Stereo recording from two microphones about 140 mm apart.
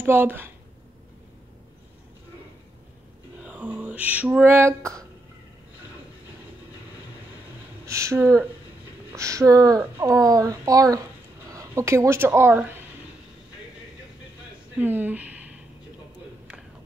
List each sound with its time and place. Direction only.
0.0 s a woman's voice: 15° right (ahead or behind)
3.4 s a sound: 10° right (ahead or behind)
7.8 s speech: 20° right (ahead or behind)
14.8 s speech: 15° right (ahead or behind)